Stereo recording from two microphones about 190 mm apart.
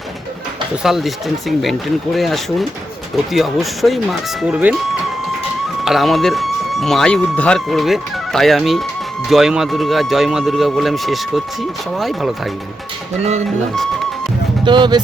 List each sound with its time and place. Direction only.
0.8 s speech: centre (ahead or behind)
5.8 s speech: centre (ahead or behind)
14.6 s speech: 25° right (ahead or behind)